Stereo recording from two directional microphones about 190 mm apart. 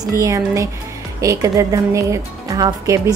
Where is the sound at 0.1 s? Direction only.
15° right (ahead or behind).